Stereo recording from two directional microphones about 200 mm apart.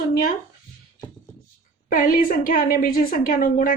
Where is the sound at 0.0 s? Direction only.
45° left (ahead or behind).